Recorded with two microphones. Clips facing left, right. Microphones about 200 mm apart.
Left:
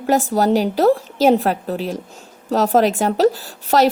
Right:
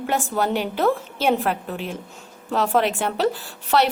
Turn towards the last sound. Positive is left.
turn(degrees=40)  # may be behind; listen again after turning